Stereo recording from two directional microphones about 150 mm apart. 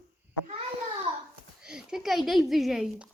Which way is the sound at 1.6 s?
5° right (ahead or behind).